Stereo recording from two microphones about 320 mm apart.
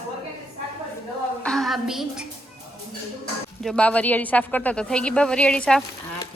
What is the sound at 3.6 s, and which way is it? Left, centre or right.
A woman's voice, centre.